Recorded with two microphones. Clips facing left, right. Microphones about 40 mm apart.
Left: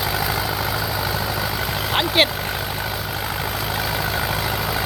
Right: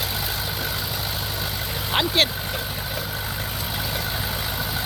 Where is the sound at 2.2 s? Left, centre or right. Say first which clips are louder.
Left 4 dB; centre.